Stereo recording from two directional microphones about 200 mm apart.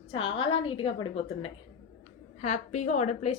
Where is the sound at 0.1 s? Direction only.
25° left (ahead or behind).